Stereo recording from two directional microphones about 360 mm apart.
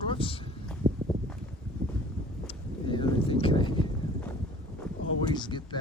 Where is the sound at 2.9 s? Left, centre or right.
Centre.